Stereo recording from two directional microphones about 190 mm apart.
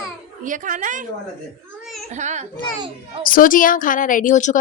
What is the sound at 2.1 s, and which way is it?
Speech, 40° right (ahead or behind).